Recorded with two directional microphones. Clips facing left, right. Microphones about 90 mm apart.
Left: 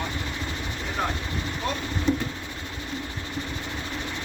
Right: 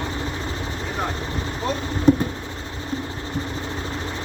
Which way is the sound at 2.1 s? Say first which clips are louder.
Right 9 dB; 50° right (ahead or behind).